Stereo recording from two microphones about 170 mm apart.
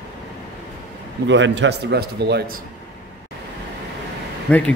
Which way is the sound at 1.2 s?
90° right.